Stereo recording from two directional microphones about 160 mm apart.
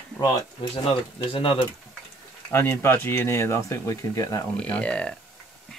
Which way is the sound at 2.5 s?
15° left (ahead or behind).